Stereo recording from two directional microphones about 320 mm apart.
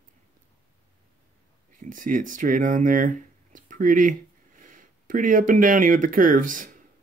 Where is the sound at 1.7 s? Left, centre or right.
Right.